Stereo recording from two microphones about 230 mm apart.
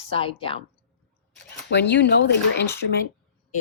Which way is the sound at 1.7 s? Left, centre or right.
Left.